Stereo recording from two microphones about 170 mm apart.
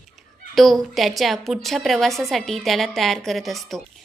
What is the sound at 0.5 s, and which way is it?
A woman's voice, centre (ahead or behind).